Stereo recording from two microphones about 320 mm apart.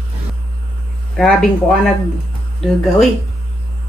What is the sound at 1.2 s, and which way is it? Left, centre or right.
Speech, centre.